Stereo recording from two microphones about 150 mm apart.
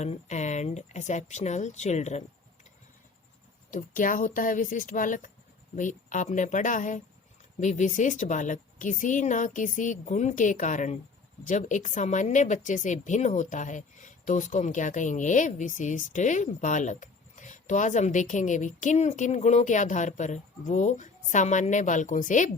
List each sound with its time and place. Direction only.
0.0 s speech: 50° left (ahead or behind)
3.7 s a woman's voice: 60° left (ahead or behind)